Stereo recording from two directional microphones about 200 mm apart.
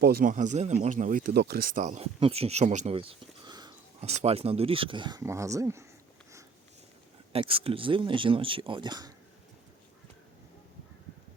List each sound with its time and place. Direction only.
0.0 s speech: 50° right (ahead or behind); by 3.8 s 20° right (ahead or behind)
4.0 s speech: 30° right (ahead or behind); by 5.8 s 15° right (ahead or behind)
7.3 s speech: 30° right (ahead or behind)